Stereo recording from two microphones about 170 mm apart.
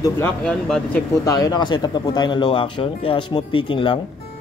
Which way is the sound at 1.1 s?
20° left (ahead or behind).